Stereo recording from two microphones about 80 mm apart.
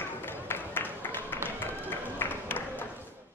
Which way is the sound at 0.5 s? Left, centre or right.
Left.